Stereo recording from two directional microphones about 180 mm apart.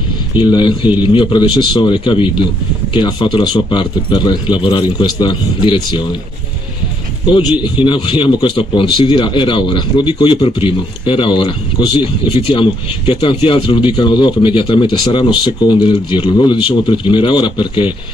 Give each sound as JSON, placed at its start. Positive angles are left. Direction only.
{"t": 0.4, "sound": "speech", "side_deg": 25}
{"t": 7.8, "sound": "speech", "side_deg": 25}